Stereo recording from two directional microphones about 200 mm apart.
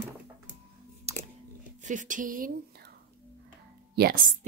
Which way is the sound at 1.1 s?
30° right (ahead or behind).